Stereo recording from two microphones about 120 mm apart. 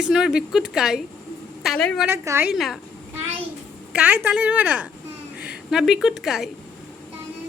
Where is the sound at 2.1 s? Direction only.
20° right (ahead or behind).